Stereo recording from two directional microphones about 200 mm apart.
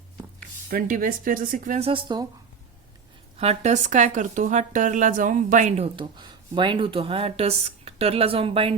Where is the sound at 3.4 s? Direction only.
35° right (ahead or behind).